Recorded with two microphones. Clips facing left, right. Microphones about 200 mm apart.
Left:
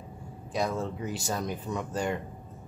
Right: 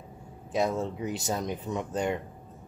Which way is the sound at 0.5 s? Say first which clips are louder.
Right 2 dB; 20° right (ahead or behind).